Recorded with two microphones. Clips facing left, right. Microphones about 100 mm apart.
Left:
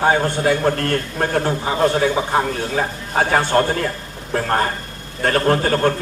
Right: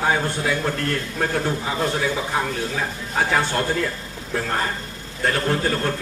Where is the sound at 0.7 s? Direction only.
55° left (ahead or behind).